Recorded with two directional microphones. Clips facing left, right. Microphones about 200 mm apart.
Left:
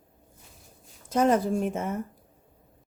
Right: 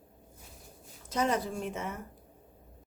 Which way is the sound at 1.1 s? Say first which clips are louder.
Left 8 dB; 50° left (ahead or behind).